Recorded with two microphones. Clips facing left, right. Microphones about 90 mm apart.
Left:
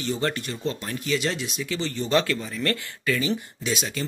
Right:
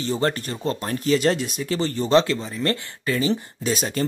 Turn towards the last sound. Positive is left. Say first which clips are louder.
# right 4 dB
turn(degrees=-45)  # may be behind; listen again after turning